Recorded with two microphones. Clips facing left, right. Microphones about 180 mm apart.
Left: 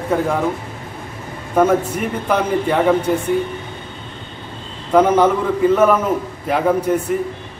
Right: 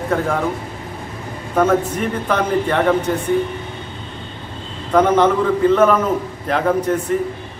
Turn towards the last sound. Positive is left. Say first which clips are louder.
# left 1 dB
turn(degrees=10)  # may be behind; listen again after turning